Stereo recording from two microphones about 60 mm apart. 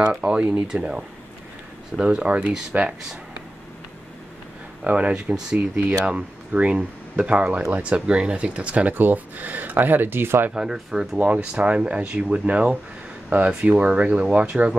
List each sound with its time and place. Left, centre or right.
0.0 s speech: centre
0.7 s speech: centre
4.8 s speech: right
8.9 s speech: right
10.5 s speech: centre
11.1 s speech: right
13.7 s speech: right